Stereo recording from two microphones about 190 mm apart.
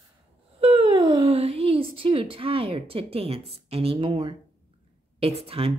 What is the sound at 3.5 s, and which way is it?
Speech, 30° right (ahead or behind).